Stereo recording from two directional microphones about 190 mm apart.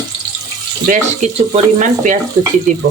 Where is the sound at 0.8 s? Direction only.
40° right (ahead or behind).